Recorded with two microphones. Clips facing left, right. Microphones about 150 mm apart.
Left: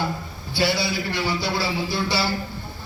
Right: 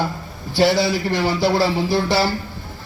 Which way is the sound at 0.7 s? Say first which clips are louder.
Right 6 dB; 45° right (ahead or behind).